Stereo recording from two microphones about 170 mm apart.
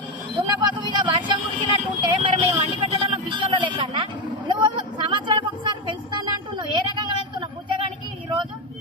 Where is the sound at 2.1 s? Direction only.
30° right (ahead or behind).